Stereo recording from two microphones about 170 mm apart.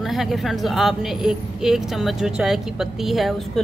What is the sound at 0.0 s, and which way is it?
Speech, centre (ahead or behind).